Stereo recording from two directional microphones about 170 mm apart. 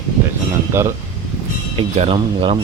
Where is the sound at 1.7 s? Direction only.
35° right (ahead or behind).